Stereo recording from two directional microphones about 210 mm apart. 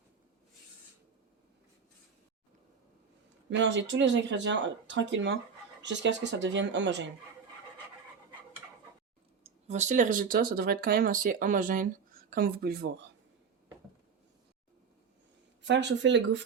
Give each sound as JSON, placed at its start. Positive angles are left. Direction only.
{"t": 3.5, "sound": "speech", "side_deg": -60}
{"t": 9.4, "sound": "speech", "side_deg": -30}
{"t": 15.6, "sound": "speech", "side_deg": -55}